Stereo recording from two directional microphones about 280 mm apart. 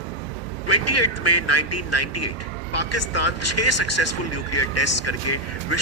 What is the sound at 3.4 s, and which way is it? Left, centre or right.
Speech, left.